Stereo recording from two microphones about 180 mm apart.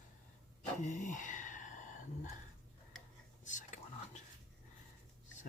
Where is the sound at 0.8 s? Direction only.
45° left (ahead or behind).